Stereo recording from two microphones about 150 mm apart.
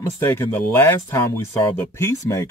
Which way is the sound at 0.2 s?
15° left (ahead or behind).